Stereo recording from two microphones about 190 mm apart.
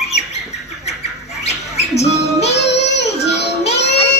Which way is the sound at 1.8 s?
35° left (ahead or behind).